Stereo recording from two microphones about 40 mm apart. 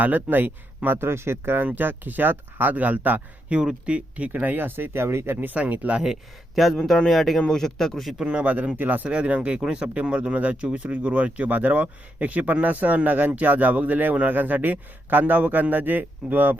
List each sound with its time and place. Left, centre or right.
0.0 s a man's voice: right
0.9 s speech: right
1.6 s a man's voice: right
2.7 s a man's voice: right
3.5 s speech: right
4.3 s a man's voice: right
4.6 s speech: right
5.5 s speech: right
7.1 s speech: centre
8.2 s speech: right
8.4 s a man's voice: right
9.0 s a man's voice: right